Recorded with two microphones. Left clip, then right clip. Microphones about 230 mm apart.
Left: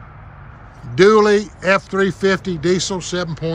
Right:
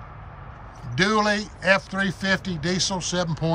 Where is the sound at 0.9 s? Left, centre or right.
Centre.